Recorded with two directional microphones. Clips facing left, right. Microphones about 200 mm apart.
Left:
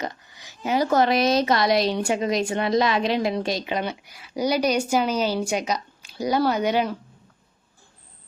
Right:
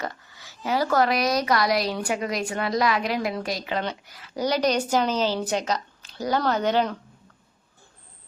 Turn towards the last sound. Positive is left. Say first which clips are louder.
# left 1 dB
turn(degrees=10)  # may be behind; listen again after turning